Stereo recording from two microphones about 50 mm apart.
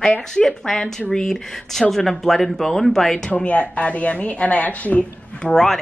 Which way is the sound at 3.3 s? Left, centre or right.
Left.